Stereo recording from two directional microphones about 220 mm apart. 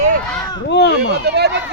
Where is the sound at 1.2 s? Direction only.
50° right (ahead or behind).